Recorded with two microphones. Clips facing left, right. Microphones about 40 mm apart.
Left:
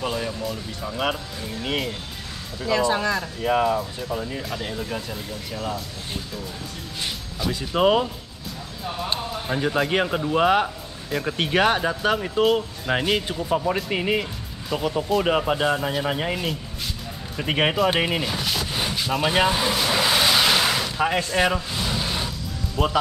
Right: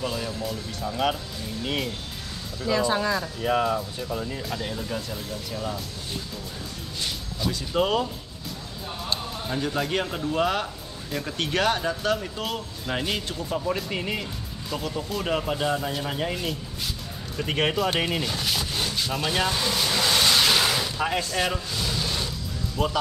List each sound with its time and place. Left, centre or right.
0.0 s music: left
0.7 s speech: centre
3.4 s speech: centre
4.1 s speech: left
7.0 s music: centre
7.8 s speech: left
9.1 s music: left
9.8 s speech: left; by 18.7 s centre
18.7 s a sound: centre